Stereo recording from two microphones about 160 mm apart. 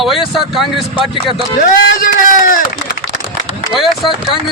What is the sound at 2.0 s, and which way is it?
Speech, 55° left (ahead or behind).